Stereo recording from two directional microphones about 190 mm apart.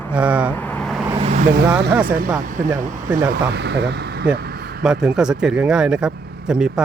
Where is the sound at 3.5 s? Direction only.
65° right (ahead or behind).